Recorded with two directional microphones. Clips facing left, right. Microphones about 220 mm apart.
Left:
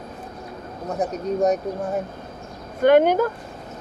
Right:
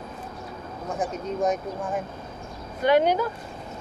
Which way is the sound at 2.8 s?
50° left (ahead or behind).